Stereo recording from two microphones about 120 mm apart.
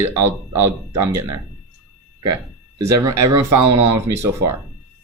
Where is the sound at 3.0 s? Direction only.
25° right (ahead or behind).